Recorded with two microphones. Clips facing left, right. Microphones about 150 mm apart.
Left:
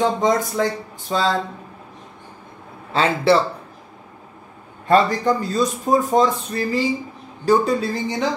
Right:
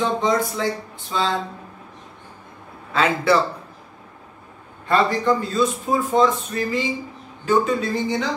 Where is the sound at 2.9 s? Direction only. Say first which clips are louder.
Left 2 dB; 30° left (ahead or behind).